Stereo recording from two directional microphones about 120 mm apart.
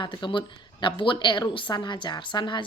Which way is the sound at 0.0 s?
40° left (ahead or behind).